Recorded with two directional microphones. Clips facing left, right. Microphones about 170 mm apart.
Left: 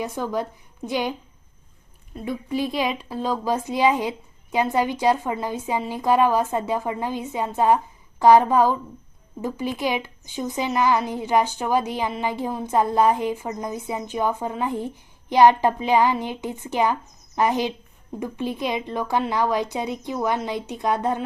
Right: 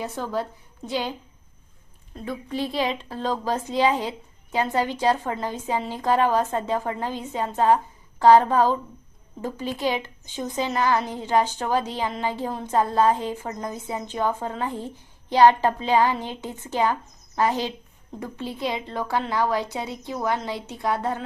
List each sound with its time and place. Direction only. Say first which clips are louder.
0.0 s speech: left 2 dB; 15° left (ahead or behind)
2.1 s speech: left 3 dB; 10° left (ahead or behind)